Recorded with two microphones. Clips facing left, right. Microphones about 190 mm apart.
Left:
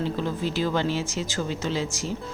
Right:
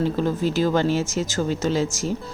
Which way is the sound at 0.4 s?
45° right (ahead or behind).